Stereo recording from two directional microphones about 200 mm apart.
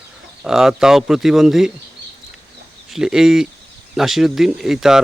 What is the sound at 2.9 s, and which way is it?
Speech, 5° right (ahead or behind).